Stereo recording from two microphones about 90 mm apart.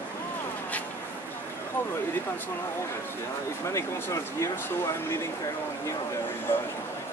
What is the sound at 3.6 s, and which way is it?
Speech, 35° left (ahead or behind).